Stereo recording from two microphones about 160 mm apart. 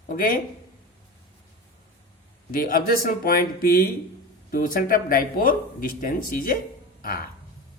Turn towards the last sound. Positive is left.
turn(degrees=65)  # may be behind; listen again after turning